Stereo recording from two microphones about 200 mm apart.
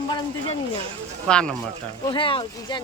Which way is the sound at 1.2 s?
5° left (ahead or behind).